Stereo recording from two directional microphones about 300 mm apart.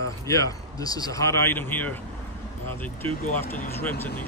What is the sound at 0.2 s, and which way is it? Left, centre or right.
Speech, centre.